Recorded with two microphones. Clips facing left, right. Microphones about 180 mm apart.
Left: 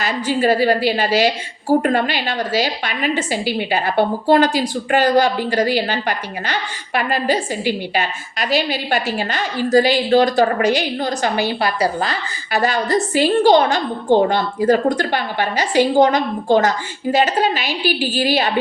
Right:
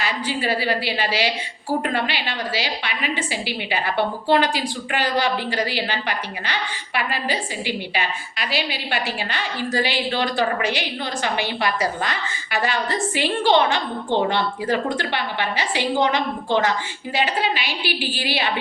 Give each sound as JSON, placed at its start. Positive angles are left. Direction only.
{"t": 0.0, "sound": "a woman's voice", "side_deg": 45}